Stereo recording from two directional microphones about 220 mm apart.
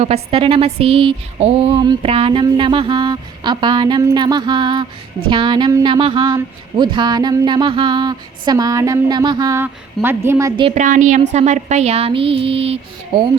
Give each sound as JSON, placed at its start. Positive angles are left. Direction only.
{"t": 0.0, "sound": "speech", "side_deg": -25}
{"t": 10.7, "sound": "speech", "side_deg": -35}